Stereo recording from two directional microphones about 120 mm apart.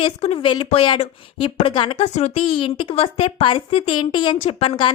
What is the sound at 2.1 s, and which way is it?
A woman's voice, 60° left (ahead or behind).